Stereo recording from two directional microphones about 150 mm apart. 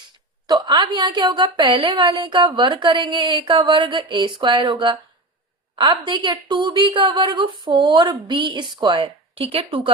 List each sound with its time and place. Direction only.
0.4 s a woman's voice: 30° right (ahead or behind)